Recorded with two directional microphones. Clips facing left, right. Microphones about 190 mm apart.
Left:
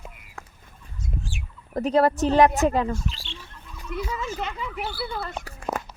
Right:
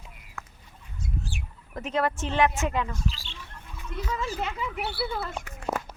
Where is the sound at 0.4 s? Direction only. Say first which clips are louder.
Left 1 dB; 30° left (ahead or behind).